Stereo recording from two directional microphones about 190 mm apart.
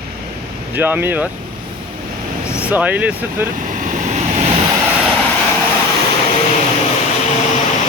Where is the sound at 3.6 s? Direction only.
40° right (ahead or behind).